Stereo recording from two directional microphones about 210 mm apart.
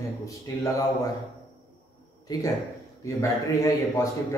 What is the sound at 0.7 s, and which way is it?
Speech, 20° left (ahead or behind).